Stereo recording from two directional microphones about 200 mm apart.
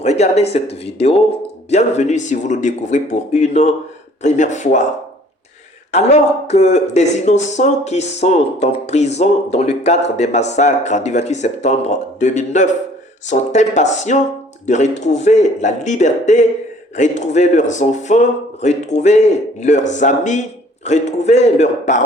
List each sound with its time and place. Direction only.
0.0 s speech: 35° left (ahead or behind)
5.9 s speech: 35° left (ahead or behind)